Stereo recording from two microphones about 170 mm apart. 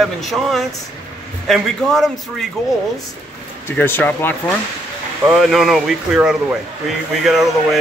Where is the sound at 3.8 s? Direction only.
10° left (ahead or behind).